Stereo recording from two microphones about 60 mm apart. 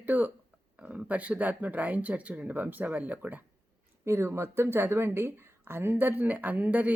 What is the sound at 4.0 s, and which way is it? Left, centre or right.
Speech, right.